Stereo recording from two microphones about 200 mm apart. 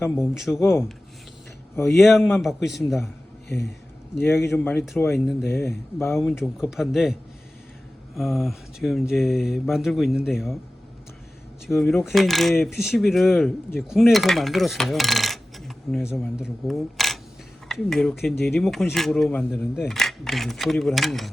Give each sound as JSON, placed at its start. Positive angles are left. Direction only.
{"t": 0.2, "sound": "speech", "side_deg": 0}
{"t": 0.6, "sound": "speech", "side_deg": 10}
{"t": 1.7, "sound": "speech", "side_deg": 0}
{"t": 4.2, "sound": "speech", "side_deg": 10}
{"t": 5.5, "sound": "speech", "side_deg": 10}
{"t": 6.2, "sound": "speech", "side_deg": 0}
{"t": 11.6, "sound": "speech", "side_deg": 0}
{"t": 13.7, "sound": "coin", "side_deg": 0}
{"t": 17.7, "sound": "speech", "side_deg": 0}